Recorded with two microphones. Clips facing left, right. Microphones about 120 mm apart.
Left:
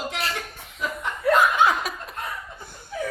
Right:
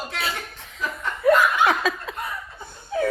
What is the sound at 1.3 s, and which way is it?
Laughter, 15° left (ahead or behind).